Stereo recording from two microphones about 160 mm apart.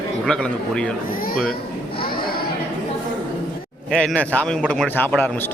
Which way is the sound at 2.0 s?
70° left (ahead or behind).